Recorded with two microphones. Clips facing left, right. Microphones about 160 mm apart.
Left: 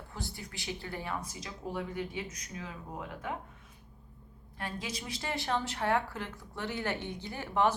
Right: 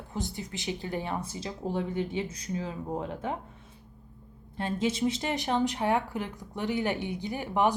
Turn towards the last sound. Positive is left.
turn(degrees=-15)  # may be behind; listen again after turning